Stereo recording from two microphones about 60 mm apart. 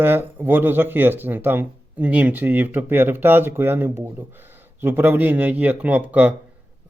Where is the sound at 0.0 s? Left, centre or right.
Right.